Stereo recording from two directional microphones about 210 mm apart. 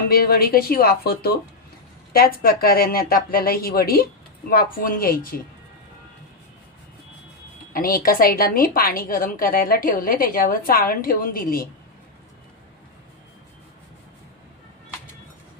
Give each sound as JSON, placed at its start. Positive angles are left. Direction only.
{"t": 0.1, "sound": "a woman's voice", "side_deg": 45}
{"t": 7.7, "sound": "a woman's voice", "side_deg": 45}